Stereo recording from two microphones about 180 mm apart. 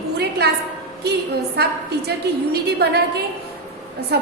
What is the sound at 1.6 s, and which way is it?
A woman's voice, 65° right (ahead or behind).